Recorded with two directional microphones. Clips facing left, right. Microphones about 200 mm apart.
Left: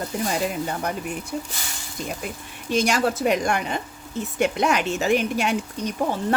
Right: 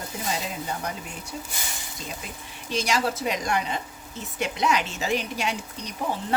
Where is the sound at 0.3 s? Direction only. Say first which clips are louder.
Left 3 dB; 60° left (ahead or behind).